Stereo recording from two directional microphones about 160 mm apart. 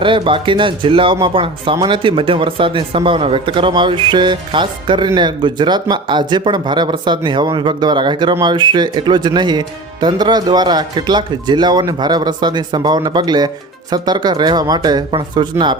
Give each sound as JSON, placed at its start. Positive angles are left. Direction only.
{"t": 0.0, "sound": "speech", "side_deg": -30}